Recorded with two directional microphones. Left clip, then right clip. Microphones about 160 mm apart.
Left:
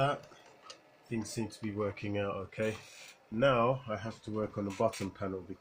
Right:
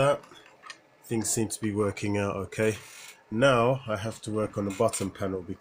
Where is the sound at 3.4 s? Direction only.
50° right (ahead or behind); by 5.4 s 30° right (ahead or behind).